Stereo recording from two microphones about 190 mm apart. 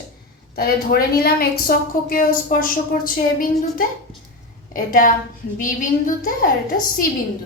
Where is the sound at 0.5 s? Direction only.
50° left (ahead or behind).